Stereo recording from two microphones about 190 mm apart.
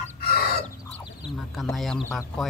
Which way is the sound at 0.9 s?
5° left (ahead or behind).